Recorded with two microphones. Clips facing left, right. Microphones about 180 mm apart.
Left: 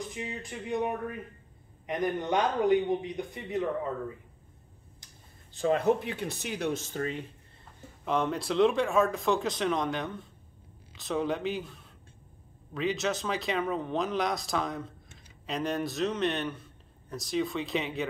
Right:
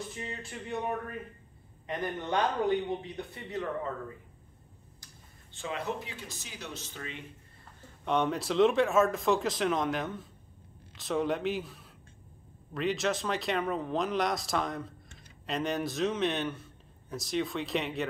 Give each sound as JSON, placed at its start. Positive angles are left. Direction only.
{"t": 0.1, "sound": "a man's voice", "side_deg": 15}
{"t": 5.5, "sound": "speech", "side_deg": 40}
{"t": 8.0, "sound": "speech", "side_deg": 0}